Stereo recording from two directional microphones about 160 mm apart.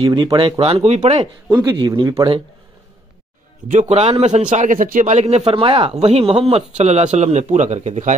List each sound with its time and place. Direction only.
0.0 s speech: 30° right (ahead or behind)
0.6 s a man's voice: 40° right (ahead or behind)
1.5 s speech: 25° right (ahead or behind)
3.7 s a man's voice: 40° right (ahead or behind)